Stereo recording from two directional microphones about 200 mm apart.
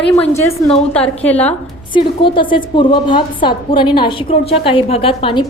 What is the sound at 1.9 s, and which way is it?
A woman's voice, 25° left (ahead or behind).